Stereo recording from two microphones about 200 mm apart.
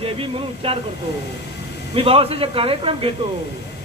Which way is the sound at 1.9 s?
30° right (ahead or behind).